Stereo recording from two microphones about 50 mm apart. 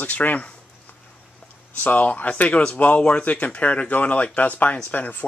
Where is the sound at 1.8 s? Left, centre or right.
Left.